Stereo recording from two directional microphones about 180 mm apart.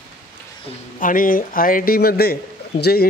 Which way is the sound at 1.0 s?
50° left (ahead or behind).